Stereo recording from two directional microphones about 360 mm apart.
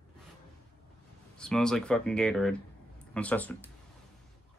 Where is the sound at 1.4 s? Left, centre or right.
Centre.